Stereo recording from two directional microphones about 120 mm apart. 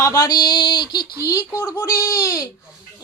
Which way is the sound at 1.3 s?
25° left (ahead or behind).